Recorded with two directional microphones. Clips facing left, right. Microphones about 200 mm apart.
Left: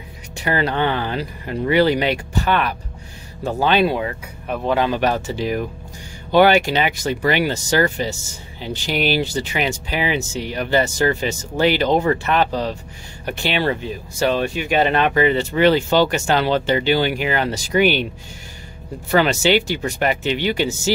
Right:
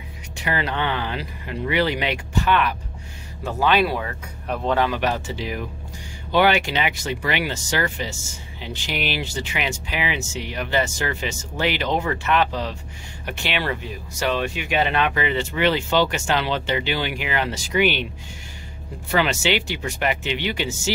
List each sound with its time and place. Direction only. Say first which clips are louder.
0.4 s speech: left 5 dB; 40° left (ahead or behind); by 4.1 s 20° left (ahead or behind)
4.5 s a man's voice: left 2 dB; centre (ahead or behind)
4.9 s speech: left 4 dB; 40° left (ahead or behind)
19.0 s speech: left 5 dB; 40° left (ahead or behind)